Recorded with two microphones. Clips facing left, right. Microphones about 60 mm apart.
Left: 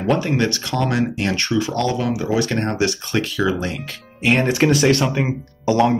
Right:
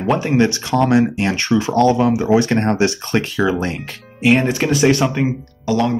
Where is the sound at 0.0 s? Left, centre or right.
Centre.